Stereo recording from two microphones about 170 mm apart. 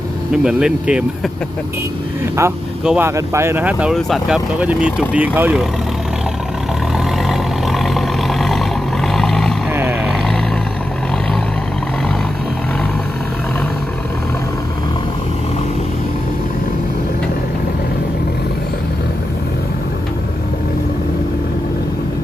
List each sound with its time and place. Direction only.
0.3 s speech: 5° right (ahead or behind)
2.4 s speech: 15° right (ahead or behind)
2.8 s speech: 5° right (ahead or behind)
3.2 s speech: 15° right (ahead or behind)
6.9 s vehicle: centre (ahead or behind)
9.7 s a sound: 10° right (ahead or behind)